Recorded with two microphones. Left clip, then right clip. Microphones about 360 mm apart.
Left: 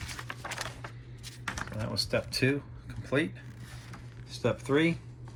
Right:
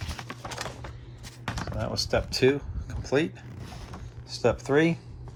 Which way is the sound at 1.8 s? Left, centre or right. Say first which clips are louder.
Right 4 dB; centre.